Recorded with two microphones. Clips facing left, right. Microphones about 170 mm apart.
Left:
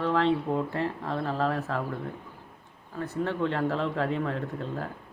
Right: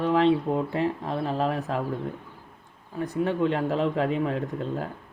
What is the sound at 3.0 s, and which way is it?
Speech, 15° right (ahead or behind).